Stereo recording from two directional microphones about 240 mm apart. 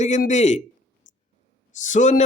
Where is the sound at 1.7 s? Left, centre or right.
Left.